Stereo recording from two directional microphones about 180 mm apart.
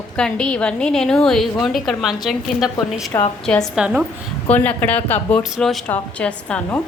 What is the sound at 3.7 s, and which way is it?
Speech, 5° right (ahead or behind).